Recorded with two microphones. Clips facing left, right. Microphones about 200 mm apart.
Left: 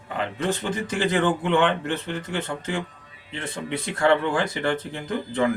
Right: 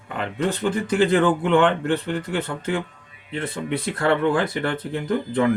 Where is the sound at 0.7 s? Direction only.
55° right (ahead or behind).